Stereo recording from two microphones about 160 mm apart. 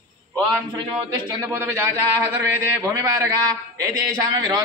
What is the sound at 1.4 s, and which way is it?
A man's voice, 15° right (ahead or behind).